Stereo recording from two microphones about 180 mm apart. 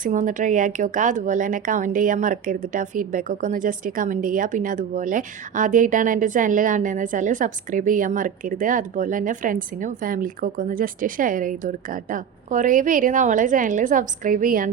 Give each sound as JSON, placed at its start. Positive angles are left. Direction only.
{"t": 0.0, "sound": "speech", "side_deg": -45}